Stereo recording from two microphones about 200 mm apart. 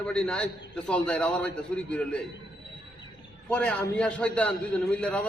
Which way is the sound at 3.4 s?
5° left (ahead or behind).